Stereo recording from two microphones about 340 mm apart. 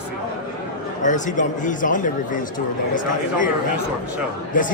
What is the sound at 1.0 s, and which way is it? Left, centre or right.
A man's voice, left.